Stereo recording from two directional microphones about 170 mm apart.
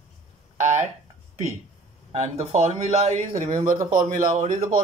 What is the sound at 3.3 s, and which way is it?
Speech, 45° right (ahead or behind).